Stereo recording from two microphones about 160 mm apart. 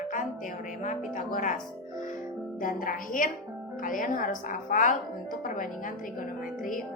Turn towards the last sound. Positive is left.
turn(degrees=60)  # may be behind; listen again after turning